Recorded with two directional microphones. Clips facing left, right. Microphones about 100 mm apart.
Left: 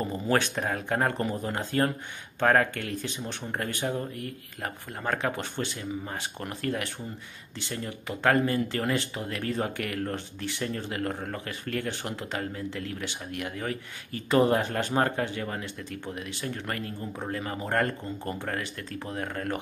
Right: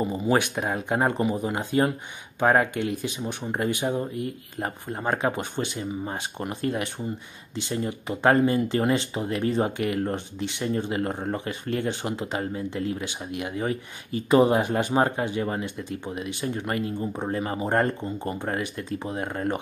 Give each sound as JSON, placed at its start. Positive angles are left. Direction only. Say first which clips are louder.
{"t": 0.0, "sound": "speech", "louder": "right 3 dB", "side_deg": -15}